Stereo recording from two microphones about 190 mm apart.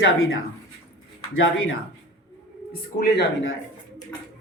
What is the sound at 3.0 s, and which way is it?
Speech, 75° left (ahead or behind).